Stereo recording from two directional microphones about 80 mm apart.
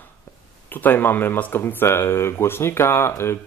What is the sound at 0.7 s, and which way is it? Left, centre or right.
Speech, left.